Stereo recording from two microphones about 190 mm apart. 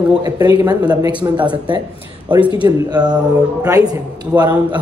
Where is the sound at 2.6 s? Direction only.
20° right (ahead or behind).